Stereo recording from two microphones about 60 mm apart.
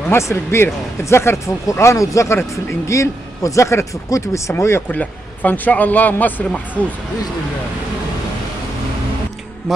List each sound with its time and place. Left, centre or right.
0.1 s speech: left
1.7 s speech: left
4.8 s speech: left